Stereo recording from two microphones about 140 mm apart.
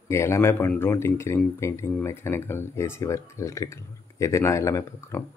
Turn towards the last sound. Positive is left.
turn(degrees=20)  # may be behind; listen again after turning